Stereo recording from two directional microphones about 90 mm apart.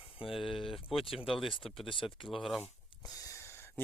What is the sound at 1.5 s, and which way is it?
Speech, 80° left.